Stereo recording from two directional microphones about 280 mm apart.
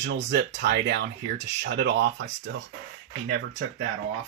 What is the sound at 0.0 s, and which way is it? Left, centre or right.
Speech, right.